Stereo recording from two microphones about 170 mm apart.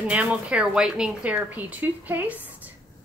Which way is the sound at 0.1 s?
5° right (ahead or behind).